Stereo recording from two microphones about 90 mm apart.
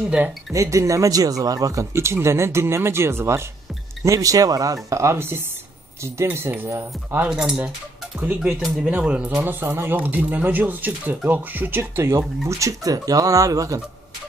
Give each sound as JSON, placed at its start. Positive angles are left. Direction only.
{"t": 0.5, "sound": "speech", "side_deg": -35}
{"t": 7.2, "sound": "speech", "side_deg": -10}
{"t": 9.4, "sound": "speech", "side_deg": -25}